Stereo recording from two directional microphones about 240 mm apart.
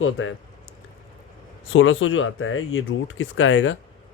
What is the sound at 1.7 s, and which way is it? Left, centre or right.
Speech, left.